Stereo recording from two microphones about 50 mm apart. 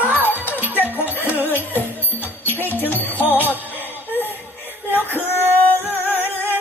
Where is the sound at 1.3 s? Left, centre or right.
Left.